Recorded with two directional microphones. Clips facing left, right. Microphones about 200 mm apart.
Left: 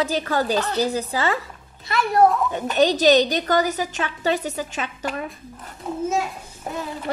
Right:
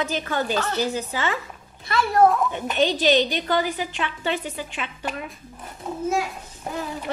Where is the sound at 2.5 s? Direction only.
40° left (ahead or behind).